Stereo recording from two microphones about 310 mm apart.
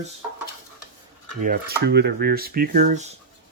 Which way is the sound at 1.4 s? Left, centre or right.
Right.